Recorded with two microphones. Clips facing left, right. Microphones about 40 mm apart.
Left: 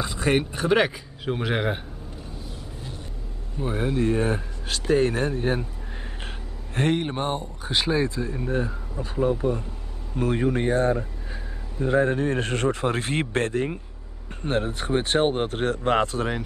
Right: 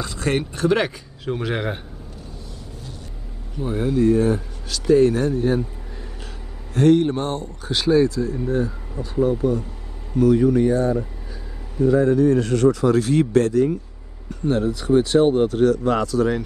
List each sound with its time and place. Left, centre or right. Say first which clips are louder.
0.0 s speech: even; centre
3.6 s speech: right 5 dB; left
6.7 s speech: right 8 dB; left